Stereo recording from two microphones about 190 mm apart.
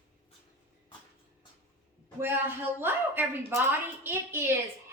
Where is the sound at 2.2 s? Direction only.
10° right (ahead or behind).